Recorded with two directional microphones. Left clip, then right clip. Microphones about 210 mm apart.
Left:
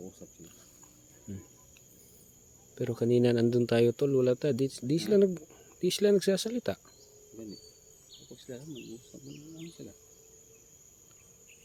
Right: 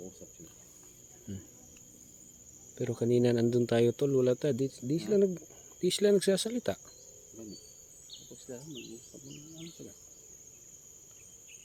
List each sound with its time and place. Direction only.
1.3 s insect: centre (ahead or behind)
2.7 s speech: 10° left (ahead or behind)
4.6 s speech: 20° left (ahead or behind)
5.8 s speech: 5° left (ahead or behind)
8.4 s insect: 55° left (ahead or behind)